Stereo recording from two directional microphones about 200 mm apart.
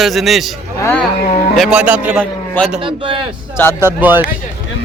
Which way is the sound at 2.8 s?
25° right (ahead or behind).